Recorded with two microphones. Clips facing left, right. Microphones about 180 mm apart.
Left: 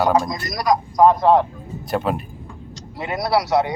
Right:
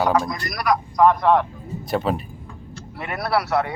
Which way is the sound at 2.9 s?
20° left (ahead or behind).